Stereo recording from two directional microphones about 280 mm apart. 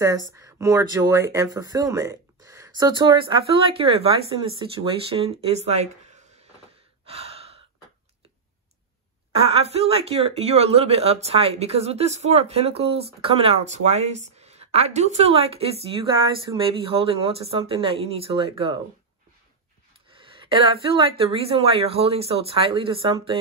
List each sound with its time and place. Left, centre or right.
0.3 s speech: centre
7.1 s gasp: right
9.3 s speech: centre
20.3 s speech: centre